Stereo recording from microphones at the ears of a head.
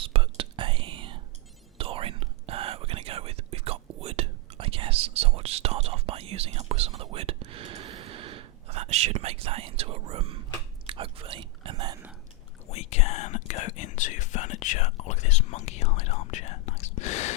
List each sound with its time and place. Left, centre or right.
0.0 s whispering: right
12.6 s whispering: left